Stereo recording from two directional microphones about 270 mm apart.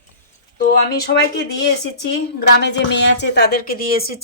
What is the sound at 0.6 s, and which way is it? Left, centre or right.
Speech, left.